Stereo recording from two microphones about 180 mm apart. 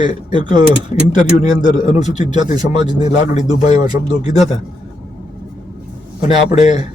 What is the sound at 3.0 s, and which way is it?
Speech, 25° right (ahead or behind).